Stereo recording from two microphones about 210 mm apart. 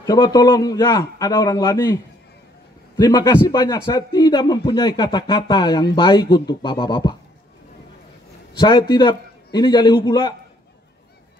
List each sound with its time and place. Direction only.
0.0 s a man's voice: 15° left (ahead or behind)
3.0 s speech: 20° left (ahead or behind)
8.5 s speech: 20° left (ahead or behind)